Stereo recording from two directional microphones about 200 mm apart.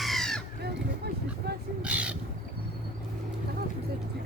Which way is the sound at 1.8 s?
5° right (ahead or behind).